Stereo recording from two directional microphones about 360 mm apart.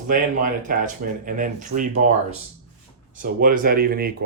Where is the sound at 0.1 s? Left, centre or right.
Right.